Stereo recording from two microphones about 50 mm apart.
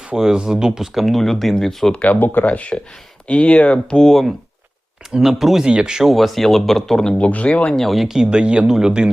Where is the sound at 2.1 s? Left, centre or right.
Left.